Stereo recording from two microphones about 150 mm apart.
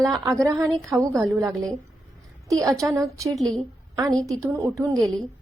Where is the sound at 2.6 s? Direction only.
20° right (ahead or behind).